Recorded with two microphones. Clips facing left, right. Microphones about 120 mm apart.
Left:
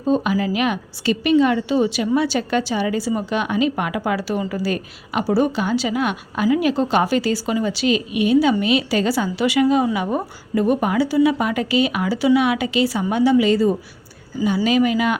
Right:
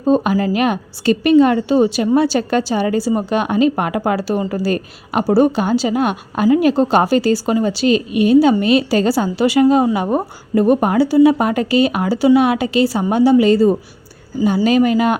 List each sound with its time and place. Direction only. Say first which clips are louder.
0.0 s a woman's voice: right 4 dB; 40° right (ahead or behind)